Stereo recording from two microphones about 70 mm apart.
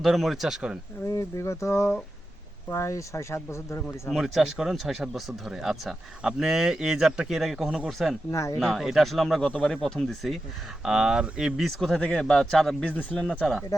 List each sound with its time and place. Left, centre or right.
0.0 s speech: centre
1.1 s speech: left
4.1 s speech: centre
8.3 s speech: left
8.5 s speech: centre
10.8 s speech: centre
11.7 s speech: centre
13.0 s speech: centre
13.4 s speech: centre